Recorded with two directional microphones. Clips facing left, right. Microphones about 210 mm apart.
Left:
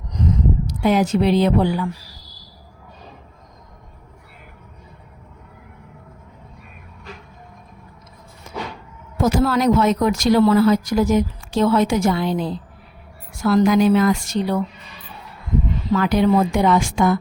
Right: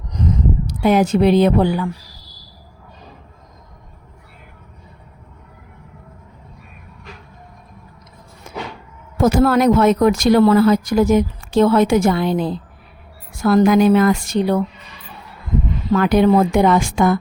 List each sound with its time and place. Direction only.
0.7 s speech: 55° right (ahead or behind)
9.2 s speech: 55° right (ahead or behind)
15.9 s speech: 55° right (ahead or behind)